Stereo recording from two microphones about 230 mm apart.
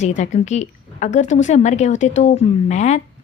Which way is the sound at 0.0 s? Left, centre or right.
Left.